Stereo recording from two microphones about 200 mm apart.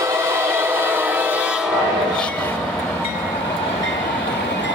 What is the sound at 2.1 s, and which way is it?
Train, 5° left (ahead or behind).